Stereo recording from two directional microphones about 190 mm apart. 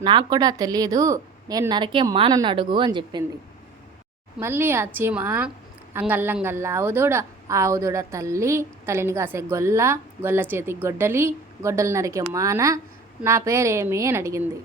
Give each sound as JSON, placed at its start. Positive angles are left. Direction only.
{"t": 0.0, "sound": "a woman's voice", "side_deg": -25}
{"t": 4.4, "sound": "a woman's voice", "side_deg": -10}